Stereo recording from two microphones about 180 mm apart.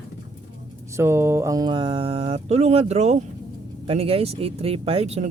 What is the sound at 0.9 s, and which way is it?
Speech, 15° right (ahead or behind).